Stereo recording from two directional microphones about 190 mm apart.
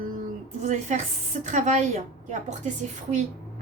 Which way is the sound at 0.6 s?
40° right (ahead or behind).